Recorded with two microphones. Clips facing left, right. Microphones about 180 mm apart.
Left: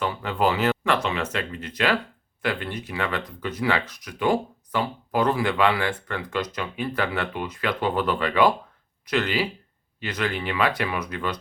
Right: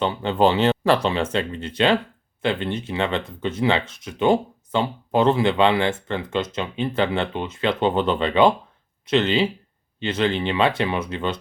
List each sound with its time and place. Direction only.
0.0 s speech: 25° right (ahead or behind)